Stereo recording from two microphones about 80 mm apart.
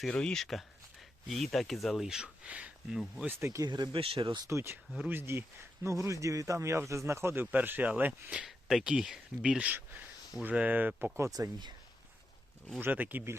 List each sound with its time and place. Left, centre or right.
0.1 s speech: centre
3.2 s speech: right
3.7 s speech: right
4.4 s speech: right
7.5 s speech: right
8.4 s speech: centre; by 11.1 s right
11.2 s speech: right
12.8 s speech: right